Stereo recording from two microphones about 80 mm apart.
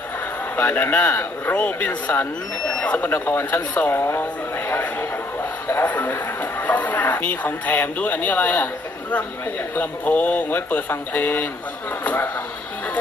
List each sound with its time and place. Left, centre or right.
0.5 s speech: left
3.1 s speech: left
4.7 s a sound: left
5.8 s speech: left